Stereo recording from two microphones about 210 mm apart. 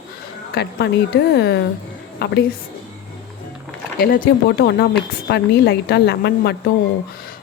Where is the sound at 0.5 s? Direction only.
55° left (ahead or behind).